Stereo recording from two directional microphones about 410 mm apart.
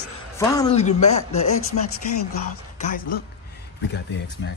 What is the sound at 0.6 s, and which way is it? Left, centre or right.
Speech, centre.